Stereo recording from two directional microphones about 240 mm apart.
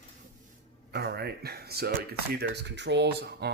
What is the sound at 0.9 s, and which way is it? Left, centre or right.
Speech, right.